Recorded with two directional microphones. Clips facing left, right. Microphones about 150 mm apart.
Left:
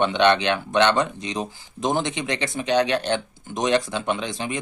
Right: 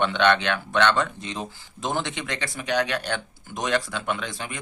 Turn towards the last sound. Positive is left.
turn(degrees=20)  # may be behind; listen again after turning